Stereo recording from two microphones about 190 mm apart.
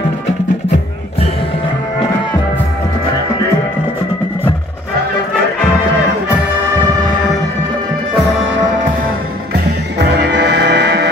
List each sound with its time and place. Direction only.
9.5 s music: 60° right (ahead or behind)